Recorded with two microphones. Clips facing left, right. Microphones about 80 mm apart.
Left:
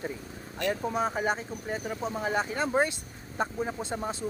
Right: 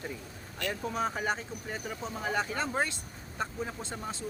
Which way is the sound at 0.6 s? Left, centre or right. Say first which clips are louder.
Left 4 dB; centre.